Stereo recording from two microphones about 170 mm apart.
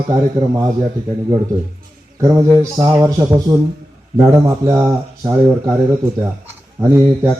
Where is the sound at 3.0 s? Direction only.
15° right (ahead or behind).